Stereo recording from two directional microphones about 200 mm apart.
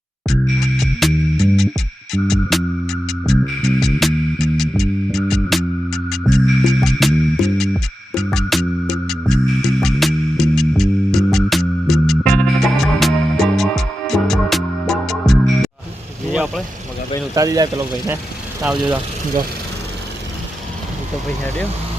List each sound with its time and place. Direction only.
0.3 s music: centre (ahead or behind)
16.3 s vehicle: 5° right (ahead or behind)
17.3 s speech: 15° right (ahead or behind)
18.6 s speech: centre (ahead or behind)